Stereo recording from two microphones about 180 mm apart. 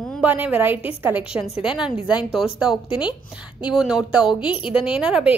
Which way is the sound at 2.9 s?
25° left (ahead or behind).